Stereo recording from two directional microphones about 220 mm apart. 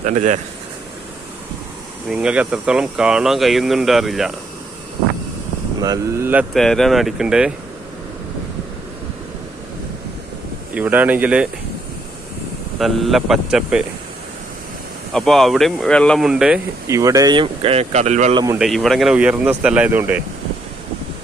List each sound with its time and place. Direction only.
0.0 s speech: 35° right (ahead or behind)
2.0 s speech: 5° right (ahead or behind)
5.8 s speech: 15° right (ahead or behind)
10.8 s speech: 5° right (ahead or behind)
12.8 s speech: centre (ahead or behind)
15.1 s speech: centre (ahead or behind)
16.8 s speech: 15° right (ahead or behind); by 18.4 s 30° right (ahead or behind)
18.6 s speech: centre (ahead or behind)